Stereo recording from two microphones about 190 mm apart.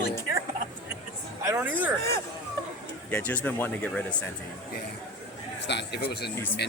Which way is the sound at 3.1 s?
10° left (ahead or behind).